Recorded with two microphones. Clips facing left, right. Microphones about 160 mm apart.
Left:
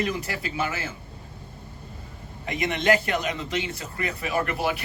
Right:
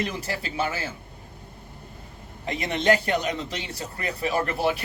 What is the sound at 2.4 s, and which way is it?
Speech, 30° right (ahead or behind).